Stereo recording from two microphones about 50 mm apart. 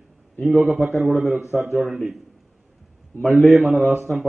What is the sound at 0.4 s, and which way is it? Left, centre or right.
Speech, right.